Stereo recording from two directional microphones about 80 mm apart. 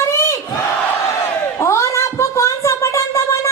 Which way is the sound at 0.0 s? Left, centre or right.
Left.